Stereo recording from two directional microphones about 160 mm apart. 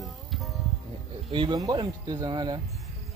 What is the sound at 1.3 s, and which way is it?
Speech, 30° right (ahead or behind).